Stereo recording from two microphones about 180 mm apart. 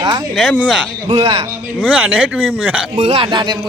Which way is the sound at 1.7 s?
5° right (ahead or behind).